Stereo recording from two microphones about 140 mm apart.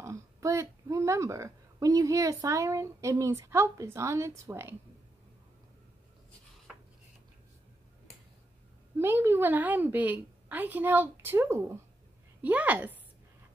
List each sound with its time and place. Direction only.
0.0 s a woman's voice: 20° right (ahead or behind)
8.9 s a woman's voice: 15° right (ahead or behind)